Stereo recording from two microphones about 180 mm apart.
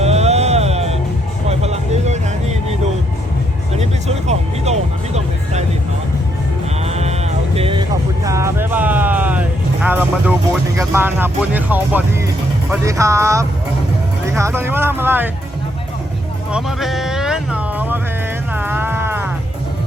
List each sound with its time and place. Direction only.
0.0 s music: 35° right (ahead or behind)
3.8 s music: 40° right (ahead or behind)
6.8 s music: 35° right (ahead or behind); by 10.3 s 10° right (ahead or behind)
10.8 s speech: 10° right (ahead or behind)
16.5 s a sound: 5° right (ahead or behind)
18.5 s music: 10° right (ahead or behind)